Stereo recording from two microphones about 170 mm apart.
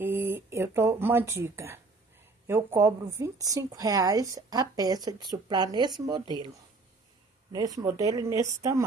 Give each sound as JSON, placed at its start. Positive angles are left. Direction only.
{"t": 0.0, "sound": "speech", "side_deg": -10}
{"t": 7.5, "sound": "speech", "side_deg": -20}